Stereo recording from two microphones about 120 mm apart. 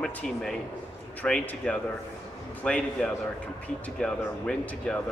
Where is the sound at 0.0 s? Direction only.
5° left (ahead or behind).